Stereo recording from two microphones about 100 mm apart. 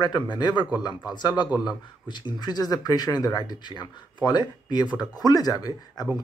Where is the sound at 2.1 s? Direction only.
45° left (ahead or behind).